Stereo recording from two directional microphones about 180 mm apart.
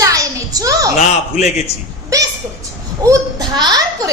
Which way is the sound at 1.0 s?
40° left (ahead or behind).